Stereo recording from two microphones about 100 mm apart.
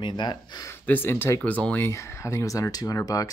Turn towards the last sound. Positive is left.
turn(degrees=40)  # may be behind; listen again after turning